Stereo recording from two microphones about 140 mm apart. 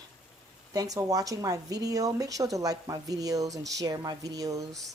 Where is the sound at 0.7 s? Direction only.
25° right (ahead or behind).